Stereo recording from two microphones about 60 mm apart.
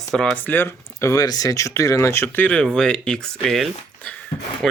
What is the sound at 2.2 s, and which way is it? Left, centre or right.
Speech, left.